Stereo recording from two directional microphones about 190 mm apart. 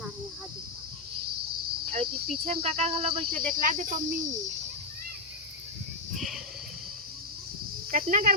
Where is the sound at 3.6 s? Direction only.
45° right (ahead or behind).